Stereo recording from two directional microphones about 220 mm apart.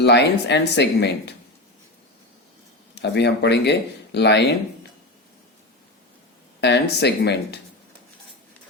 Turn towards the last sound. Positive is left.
turn(degrees=50)  # may be behind; listen again after turning